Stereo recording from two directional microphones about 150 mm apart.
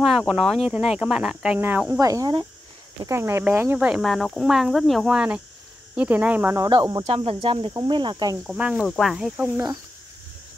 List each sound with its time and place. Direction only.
0.3 s speech: centre (ahead or behind)
2.0 s cricket: 20° right (ahead or behind)
3.1 s speech: 15° right (ahead or behind)
6.7 s cricket: 25° right (ahead or behind)
7.1 s speech: 40° right (ahead or behind)
8.5 s speech: 5° right (ahead or behind)